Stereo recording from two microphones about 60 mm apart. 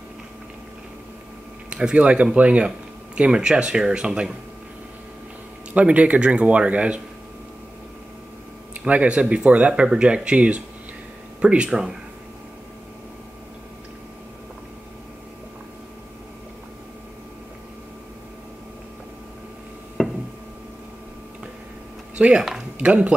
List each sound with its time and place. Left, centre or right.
1.7 s speech: centre
5.7 s speech: right
8.8 s speech: right
20.0 s a sound: centre
22.1 s a sound: centre
22.8 s speech: right